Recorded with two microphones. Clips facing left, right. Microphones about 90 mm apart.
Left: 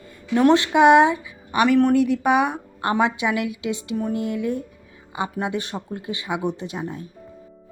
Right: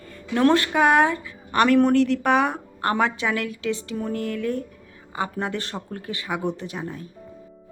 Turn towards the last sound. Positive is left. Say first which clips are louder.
# left 2 dB
turn(degrees=20)  # may be behind; listen again after turning